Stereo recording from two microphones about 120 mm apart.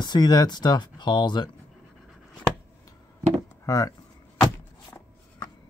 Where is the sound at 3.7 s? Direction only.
30° left (ahead or behind).